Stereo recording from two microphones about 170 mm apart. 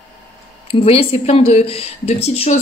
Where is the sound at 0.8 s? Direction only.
35° left (ahead or behind).